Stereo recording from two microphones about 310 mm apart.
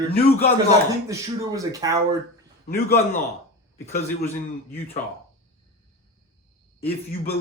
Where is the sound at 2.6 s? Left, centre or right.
Left.